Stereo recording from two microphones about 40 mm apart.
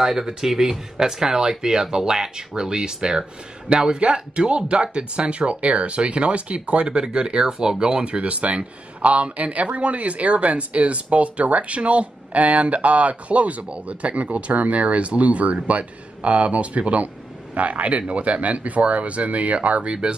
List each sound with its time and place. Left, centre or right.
0.0 s speech: centre; by 20.2 s right